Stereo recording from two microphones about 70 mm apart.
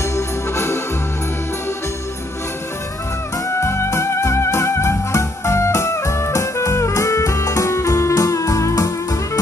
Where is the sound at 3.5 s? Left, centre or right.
Left.